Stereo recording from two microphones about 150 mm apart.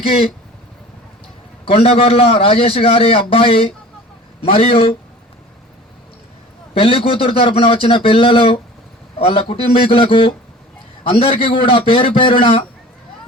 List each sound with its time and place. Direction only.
1.6 s a man's voice: 40° left (ahead or behind)
6.7 s a man's voice: 35° left (ahead or behind)